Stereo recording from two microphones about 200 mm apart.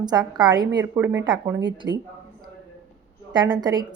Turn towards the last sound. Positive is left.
turn(degrees=-20)  # may be behind; listen again after turning